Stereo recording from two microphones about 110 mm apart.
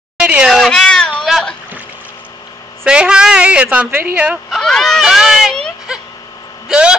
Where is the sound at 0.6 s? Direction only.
5° left (ahead or behind).